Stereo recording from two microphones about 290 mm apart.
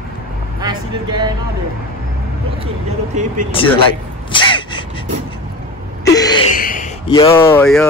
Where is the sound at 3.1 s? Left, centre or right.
Right.